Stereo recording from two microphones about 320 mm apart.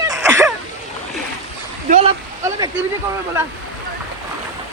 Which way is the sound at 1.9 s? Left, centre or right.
Centre.